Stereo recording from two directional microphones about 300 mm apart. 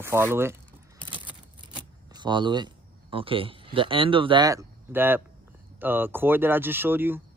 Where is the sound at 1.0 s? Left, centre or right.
Centre.